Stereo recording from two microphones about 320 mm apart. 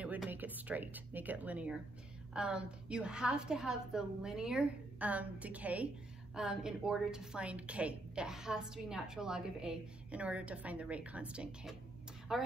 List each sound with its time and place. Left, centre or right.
0.0 s a woman's voice: centre